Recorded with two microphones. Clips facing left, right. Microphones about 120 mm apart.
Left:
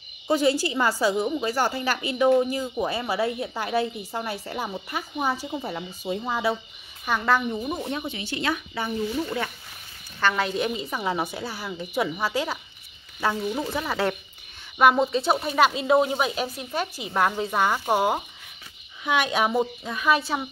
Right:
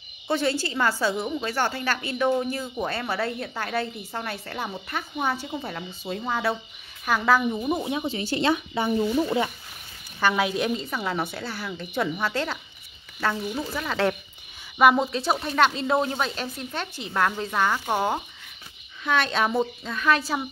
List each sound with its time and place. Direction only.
0.3 s a woman's voice: 15° left (ahead or behind); by 8.0 s 10° right (ahead or behind)
8.1 s speech: 35° right (ahead or behind)
10.2 s a woman's voice: 5° right (ahead or behind)
13.6 s a woman's voice: 15° left (ahead or behind)
14.8 s a woman's voice: centre (ahead or behind)